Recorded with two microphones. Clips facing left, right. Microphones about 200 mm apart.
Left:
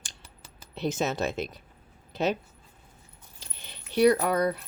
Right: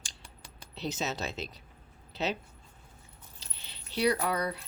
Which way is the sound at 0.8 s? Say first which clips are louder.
Left 6 dB; 55° left (ahead or behind).